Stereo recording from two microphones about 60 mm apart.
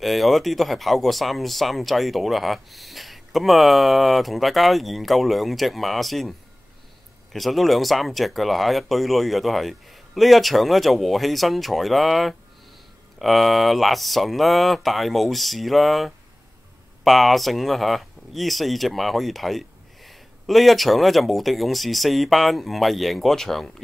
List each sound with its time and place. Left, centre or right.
0.0 s speech: centre
7.3 s speech: centre